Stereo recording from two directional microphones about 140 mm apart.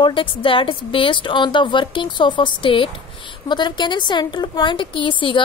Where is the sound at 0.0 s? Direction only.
35° left (ahead or behind).